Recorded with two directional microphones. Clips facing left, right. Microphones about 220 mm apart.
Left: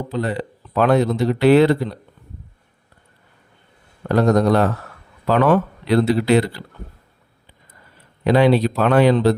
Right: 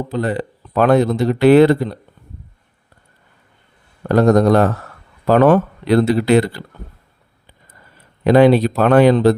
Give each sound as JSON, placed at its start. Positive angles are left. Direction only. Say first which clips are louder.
{"t": 0.1, "sound": "speech", "louder": "right 3 dB", "side_deg": -50}
{"t": 4.1, "sound": "speech", "louder": "right 4 dB", "side_deg": -45}
{"t": 8.2, "sound": "speech", "louder": "right 4 dB", "side_deg": -50}